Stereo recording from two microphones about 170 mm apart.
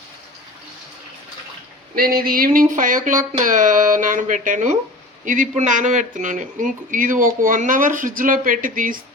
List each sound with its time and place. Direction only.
2.0 s speech: 60° right (ahead or behind)